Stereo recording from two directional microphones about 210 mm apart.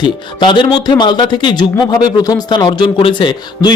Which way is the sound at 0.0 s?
25° left (ahead or behind).